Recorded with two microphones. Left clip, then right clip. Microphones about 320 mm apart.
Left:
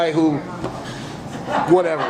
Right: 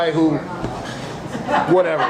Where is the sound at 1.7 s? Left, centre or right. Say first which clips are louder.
Left 1 dB; left.